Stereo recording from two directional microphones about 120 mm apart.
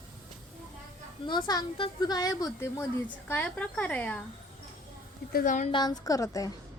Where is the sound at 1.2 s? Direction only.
40° left (ahead or behind).